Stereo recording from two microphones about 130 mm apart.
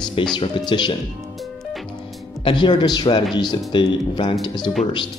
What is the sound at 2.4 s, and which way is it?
Speech, 35° left (ahead or behind).